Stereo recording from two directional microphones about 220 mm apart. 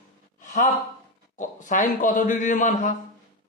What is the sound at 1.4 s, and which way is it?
A man's voice, 35° left (ahead or behind).